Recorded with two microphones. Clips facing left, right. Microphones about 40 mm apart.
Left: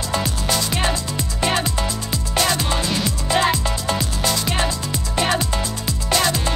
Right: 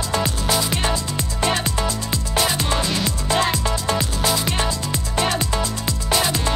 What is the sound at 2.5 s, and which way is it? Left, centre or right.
Music, centre.